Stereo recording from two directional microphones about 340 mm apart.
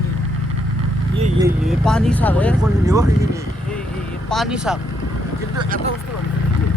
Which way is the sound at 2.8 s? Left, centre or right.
Centre.